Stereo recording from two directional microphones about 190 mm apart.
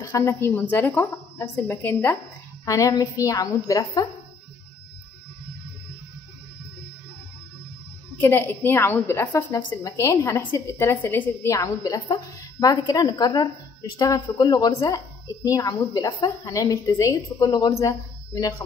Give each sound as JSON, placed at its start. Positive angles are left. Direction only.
{"t": 0.0, "sound": "a woman's voice", "side_deg": 15}
{"t": 8.2, "sound": "a woman's voice", "side_deg": 10}